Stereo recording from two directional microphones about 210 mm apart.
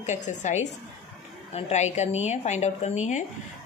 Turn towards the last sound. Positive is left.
turn(degrees=35)  # may be behind; listen again after turning